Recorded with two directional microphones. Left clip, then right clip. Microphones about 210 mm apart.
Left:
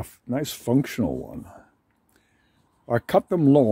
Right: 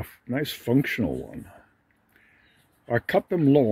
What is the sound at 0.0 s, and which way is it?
Speech, 10° left (ahead or behind).